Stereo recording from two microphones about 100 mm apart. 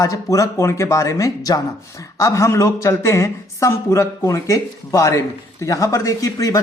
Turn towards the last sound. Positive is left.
turn(degrees=35)  # may be behind; listen again after turning